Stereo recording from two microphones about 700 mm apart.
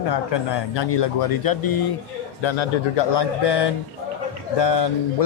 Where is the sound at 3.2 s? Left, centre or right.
Left.